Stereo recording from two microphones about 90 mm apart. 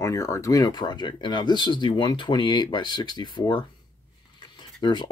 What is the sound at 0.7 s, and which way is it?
Speech, 55° left (ahead or behind).